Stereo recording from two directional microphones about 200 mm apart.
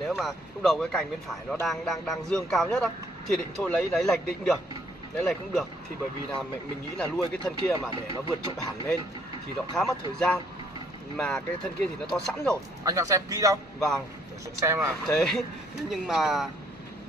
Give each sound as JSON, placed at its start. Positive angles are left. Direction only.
{"t": 0.0, "sound": "a man's voice", "side_deg": 0}
{"t": 7.0, "sound": "a man's voice", "side_deg": 5}
{"t": 9.8, "sound": "a man's voice", "side_deg": 5}
{"t": 12.8, "sound": "speech", "side_deg": -15}
{"t": 13.7, "sound": "a man's voice", "side_deg": 0}
{"t": 14.6, "sound": "speech", "side_deg": -15}
{"t": 15.0, "sound": "a man's voice", "side_deg": 5}